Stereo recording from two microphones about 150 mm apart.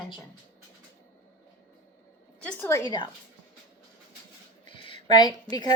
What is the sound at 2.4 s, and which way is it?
Speech, 15° left (ahead or behind).